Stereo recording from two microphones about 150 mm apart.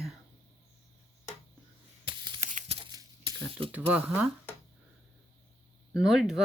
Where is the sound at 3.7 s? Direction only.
10° right (ahead or behind).